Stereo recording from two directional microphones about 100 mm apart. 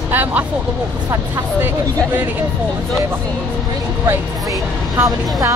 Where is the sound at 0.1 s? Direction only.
20° right (ahead or behind).